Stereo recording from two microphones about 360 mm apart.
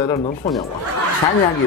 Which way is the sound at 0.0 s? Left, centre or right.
Centre.